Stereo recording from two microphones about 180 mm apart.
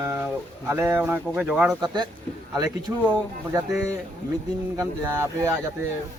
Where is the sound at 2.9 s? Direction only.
15° right (ahead or behind).